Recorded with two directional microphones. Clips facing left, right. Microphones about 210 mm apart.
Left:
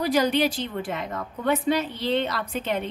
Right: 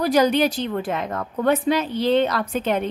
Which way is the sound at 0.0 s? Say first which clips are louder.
Right 4 dB; 45° right (ahead or behind).